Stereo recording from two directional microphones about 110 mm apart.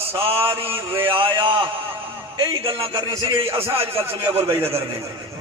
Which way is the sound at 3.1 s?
40° right (ahead or behind).